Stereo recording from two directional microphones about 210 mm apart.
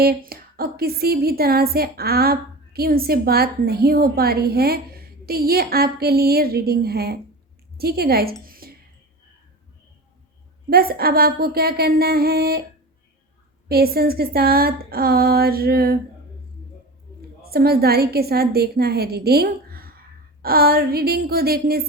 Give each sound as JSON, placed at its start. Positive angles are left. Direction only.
{"t": 0.0, "sound": "a woman's voice", "side_deg": -45}
{"t": 8.4, "sound": "a sound", "side_deg": -45}
{"t": 10.7, "sound": "a woman's voice", "side_deg": -45}
{"t": 13.7, "sound": "a woman's voice", "side_deg": -45}
{"t": 17.4, "sound": "a woman's voice", "side_deg": -45}